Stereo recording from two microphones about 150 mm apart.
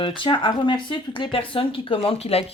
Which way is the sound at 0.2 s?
35° left (ahead or behind).